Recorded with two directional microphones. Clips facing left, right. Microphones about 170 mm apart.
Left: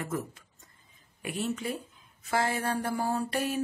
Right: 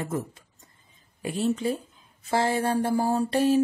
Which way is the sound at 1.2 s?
30° right (ahead or behind).